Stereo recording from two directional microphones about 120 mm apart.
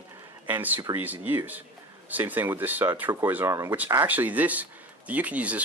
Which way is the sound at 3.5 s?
30° right (ahead or behind).